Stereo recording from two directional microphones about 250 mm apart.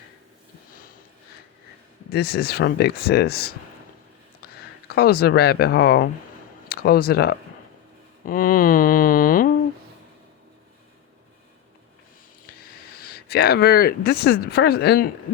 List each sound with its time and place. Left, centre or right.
2.1 s speech: left
4.9 s speech: left
8.2 s a sound: left
13.1 s speech: left